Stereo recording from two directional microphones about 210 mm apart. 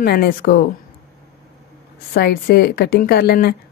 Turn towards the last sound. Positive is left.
turn(degrees=50)  # may be behind; listen again after turning